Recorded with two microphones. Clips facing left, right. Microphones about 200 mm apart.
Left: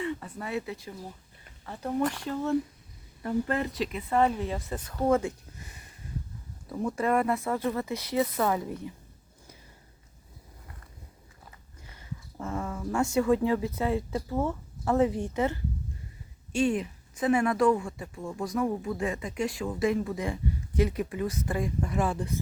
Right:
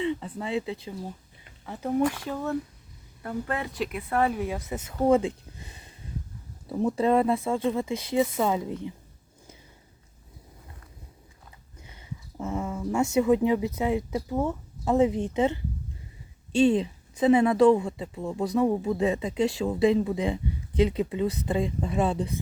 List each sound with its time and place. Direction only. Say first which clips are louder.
0.0 s a sound: right 4 dB; 20° right (ahead or behind)
0.3 s speech: right 4 dB; 25° right (ahead or behind); by 2.4 s 5° right (ahead or behind)
3.7 s speech: even; centre (ahead or behind); by 8.9 s 20° right (ahead or behind)
11.8 s speech: right 1 dB; 20° right (ahead or behind)
16.6 s speech: right 5 dB; 25° right (ahead or behind)